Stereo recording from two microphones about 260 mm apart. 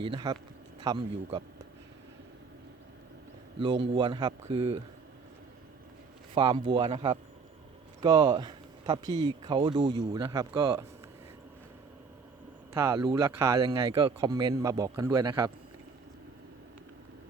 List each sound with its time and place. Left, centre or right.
0.0 s speech: centre
3.6 s speech: centre
6.3 s speech: centre
12.7 s speech: centre